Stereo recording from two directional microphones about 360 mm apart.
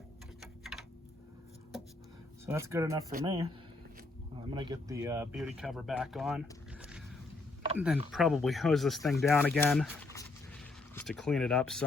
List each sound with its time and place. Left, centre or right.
0.6 s a sound: centre
2.5 s speech: centre
7.8 s speech: centre